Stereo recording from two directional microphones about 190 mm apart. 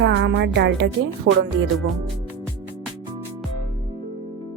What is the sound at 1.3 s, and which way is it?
Speech, 80° right.